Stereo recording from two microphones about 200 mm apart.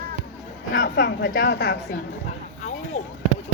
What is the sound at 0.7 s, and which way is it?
A woman's voice, 65° left (ahead or behind).